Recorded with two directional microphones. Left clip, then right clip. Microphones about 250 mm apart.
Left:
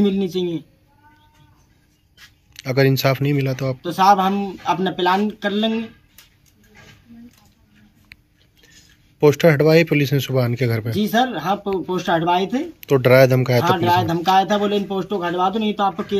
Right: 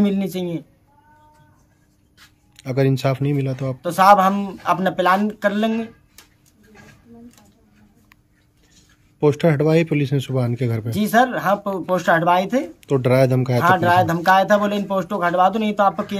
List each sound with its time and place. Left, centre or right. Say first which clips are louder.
0.0 s a man's voice: left 2 dB; centre
2.5 s speech: left 3 dB; centre
9.2 s a man's voice: left 3 dB; centre